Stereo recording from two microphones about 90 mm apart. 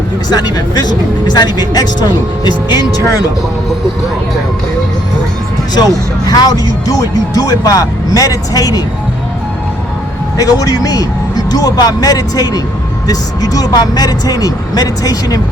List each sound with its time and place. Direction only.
0.3 s speech: 50° left (ahead or behind)
5.7 s speech: 45° left (ahead or behind)
10.3 s speech: 40° left (ahead or behind)